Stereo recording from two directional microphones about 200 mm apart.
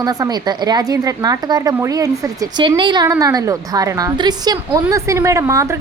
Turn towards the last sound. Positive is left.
turn(degrees=-15)  # may be behind; listen again after turning